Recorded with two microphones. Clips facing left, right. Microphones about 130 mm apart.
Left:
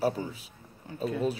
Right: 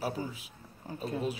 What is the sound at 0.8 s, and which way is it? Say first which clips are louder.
Speech: right 1 dB; 35° right (ahead or behind).